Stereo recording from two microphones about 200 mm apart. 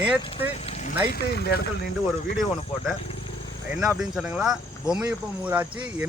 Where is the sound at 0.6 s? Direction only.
30° left (ahead or behind).